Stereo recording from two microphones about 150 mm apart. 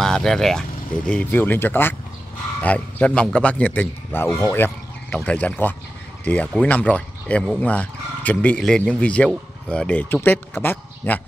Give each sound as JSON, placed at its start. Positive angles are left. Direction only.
{"t": 0.0, "sound": "a man's voice", "side_deg": 5}